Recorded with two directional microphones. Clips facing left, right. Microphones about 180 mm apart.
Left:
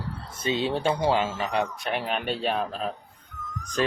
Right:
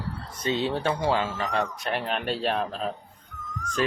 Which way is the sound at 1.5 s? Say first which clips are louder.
Even; 5° left (ahead or behind).